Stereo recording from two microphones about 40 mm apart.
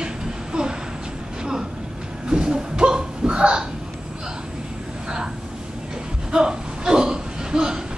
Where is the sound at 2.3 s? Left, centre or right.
Centre.